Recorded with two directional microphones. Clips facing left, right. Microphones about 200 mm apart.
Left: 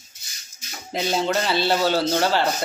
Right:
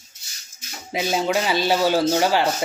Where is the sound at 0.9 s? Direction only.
10° right (ahead or behind).